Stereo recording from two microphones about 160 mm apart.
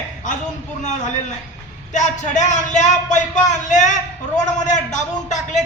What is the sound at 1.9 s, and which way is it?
A man's voice, 50° left (ahead or behind).